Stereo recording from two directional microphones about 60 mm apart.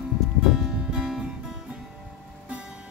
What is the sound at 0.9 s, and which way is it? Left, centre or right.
Music, centre.